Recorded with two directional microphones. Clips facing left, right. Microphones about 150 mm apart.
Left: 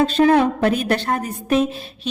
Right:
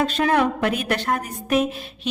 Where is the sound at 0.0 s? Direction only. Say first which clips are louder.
Left 5 dB; 30° left (ahead or behind).